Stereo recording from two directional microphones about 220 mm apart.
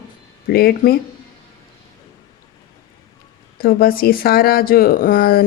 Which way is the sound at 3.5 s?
40° left (ahead or behind).